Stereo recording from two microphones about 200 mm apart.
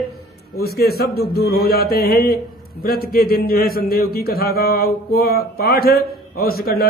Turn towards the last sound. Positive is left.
turn(degrees=50)  # may be behind; listen again after turning